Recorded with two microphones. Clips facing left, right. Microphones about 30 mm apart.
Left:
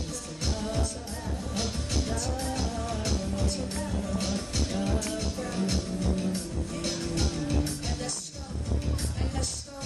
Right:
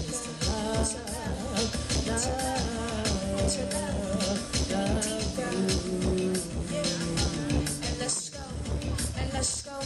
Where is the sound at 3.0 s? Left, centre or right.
Right.